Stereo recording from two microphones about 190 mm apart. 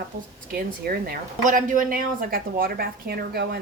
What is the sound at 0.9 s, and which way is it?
A woman's voice, 50° right (ahead or behind).